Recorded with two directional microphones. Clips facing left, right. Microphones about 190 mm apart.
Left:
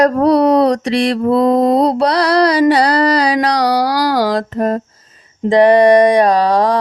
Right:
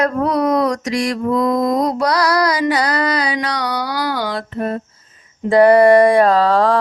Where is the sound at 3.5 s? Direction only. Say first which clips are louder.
Left 7 dB; 85° left.